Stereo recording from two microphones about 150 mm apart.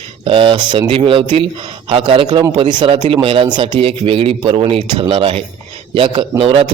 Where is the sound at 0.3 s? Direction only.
35° right (ahead or behind).